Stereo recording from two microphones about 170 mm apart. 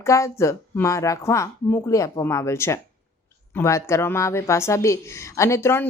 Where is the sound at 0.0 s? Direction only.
15° left (ahead or behind).